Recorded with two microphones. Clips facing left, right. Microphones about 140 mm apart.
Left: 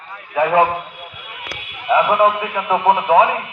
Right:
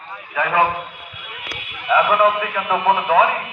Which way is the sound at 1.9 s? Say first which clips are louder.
Left 1 dB; 20° left (ahead or behind).